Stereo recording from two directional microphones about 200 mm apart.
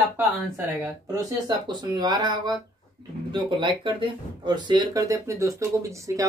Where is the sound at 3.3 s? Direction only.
25° right (ahead or behind).